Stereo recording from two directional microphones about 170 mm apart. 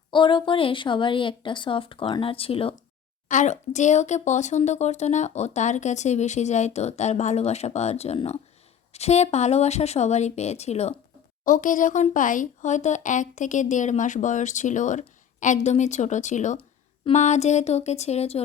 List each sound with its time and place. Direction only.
0.1 s speech: 30° left (ahead or behind)
3.2 s speech: 45° left (ahead or behind)
11.4 s speech: 50° left (ahead or behind)